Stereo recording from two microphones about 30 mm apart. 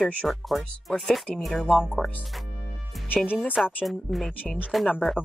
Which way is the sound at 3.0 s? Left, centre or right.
Left.